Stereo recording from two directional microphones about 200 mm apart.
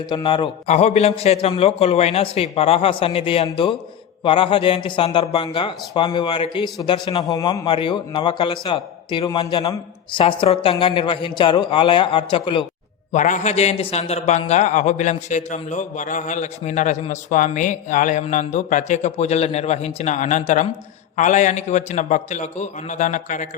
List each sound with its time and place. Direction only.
0.0 s a man's voice: 20° left (ahead or behind)
13.1 s a man's voice: 40° left (ahead or behind)